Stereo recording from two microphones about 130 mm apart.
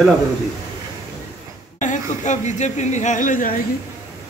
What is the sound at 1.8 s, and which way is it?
Speech, 70° left (ahead or behind).